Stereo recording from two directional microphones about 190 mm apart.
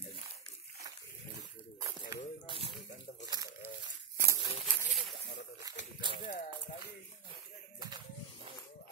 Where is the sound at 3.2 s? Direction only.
20° right (ahead or behind).